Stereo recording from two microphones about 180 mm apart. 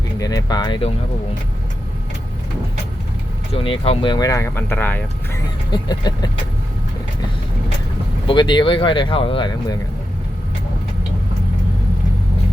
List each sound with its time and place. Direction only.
0.2 s speech: 20° left (ahead or behind)
3.5 s speech: 30° left (ahead or behind); by 5.4 s 10° left (ahead or behind)
5.7 s speech: 25° left (ahead or behind)
8.3 s speech: 25° left (ahead or behind)